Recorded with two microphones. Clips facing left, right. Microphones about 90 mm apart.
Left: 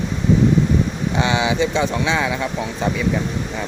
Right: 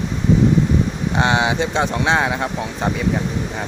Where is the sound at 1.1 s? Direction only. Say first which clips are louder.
Right 1 dB; 50° right (ahead or behind).